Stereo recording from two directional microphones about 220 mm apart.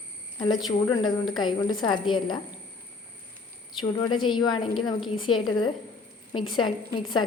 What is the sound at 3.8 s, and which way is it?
A woman's voice, 20° left (ahead or behind).